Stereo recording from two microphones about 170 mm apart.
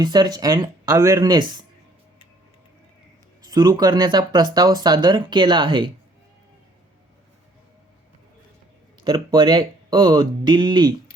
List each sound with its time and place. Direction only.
0.0 s speech: 25° right (ahead or behind)
3.4 s speech: 25° right (ahead or behind)
9.0 s speech: 25° right (ahead or behind)